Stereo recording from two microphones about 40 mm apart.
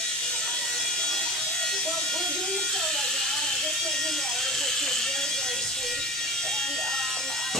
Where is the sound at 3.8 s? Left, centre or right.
Centre.